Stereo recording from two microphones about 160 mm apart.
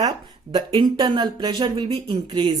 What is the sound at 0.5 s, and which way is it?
Speech, 30° right (ahead or behind).